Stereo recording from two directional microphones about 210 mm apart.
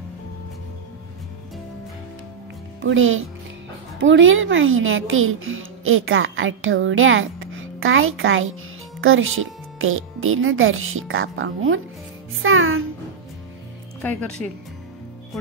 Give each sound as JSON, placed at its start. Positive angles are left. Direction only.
{"t": 2.8, "sound": "a woman's voice", "side_deg": -70}
{"t": 14.4, "sound": "speech", "side_deg": 5}